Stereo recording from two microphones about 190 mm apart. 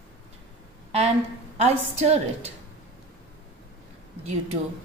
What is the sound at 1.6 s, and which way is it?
Speech, 35° right (ahead or behind).